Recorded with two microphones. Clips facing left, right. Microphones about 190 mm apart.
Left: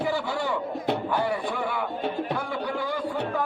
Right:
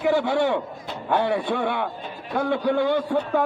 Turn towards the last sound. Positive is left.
turn(degrees=-70)  # may be behind; listen again after turning